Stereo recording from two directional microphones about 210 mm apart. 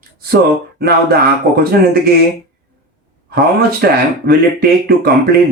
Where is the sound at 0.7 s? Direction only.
50° right (ahead or behind).